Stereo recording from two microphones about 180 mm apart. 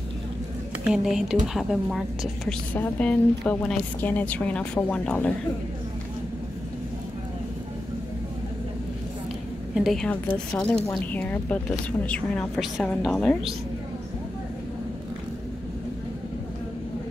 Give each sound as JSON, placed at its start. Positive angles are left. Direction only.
{"t": 0.8, "sound": "a woman's voice", "side_deg": -5}
{"t": 9.8, "sound": "a woman's voice", "side_deg": 0}